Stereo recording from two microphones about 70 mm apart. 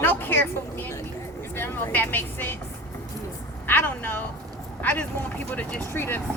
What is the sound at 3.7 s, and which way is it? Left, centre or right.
Speech, left.